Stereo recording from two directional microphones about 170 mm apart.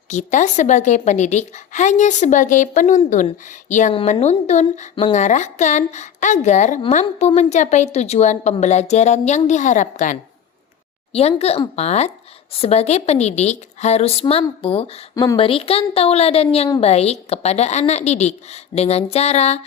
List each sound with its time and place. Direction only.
0.1 s a woman's voice: 45° left (ahead or behind)
11.1 s a woman's voice: 35° left (ahead or behind)
15.1 s speech: 20° left (ahead or behind)
15.4 s a woman's voice: 35° left (ahead or behind)